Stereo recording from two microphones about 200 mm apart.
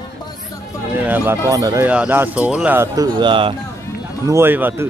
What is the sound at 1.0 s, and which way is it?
Speech, 10° right (ahead or behind).